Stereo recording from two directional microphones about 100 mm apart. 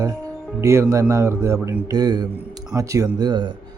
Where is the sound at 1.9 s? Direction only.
45° right (ahead or behind).